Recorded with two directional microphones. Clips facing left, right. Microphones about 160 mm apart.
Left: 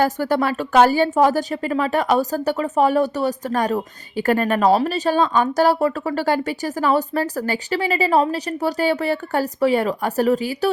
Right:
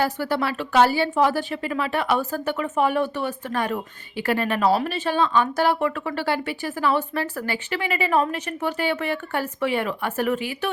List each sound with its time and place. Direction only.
0.0 s speech: 45° left (ahead or behind)